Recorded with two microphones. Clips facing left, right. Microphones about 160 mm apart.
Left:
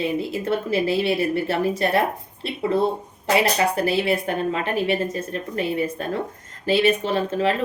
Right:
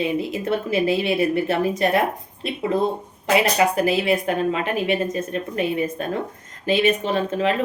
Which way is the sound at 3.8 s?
30° left (ahead or behind).